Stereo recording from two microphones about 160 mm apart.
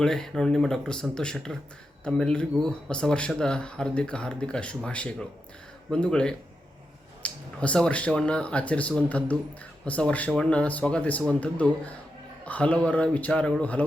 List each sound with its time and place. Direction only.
0.0 s speech: 5° left (ahead or behind)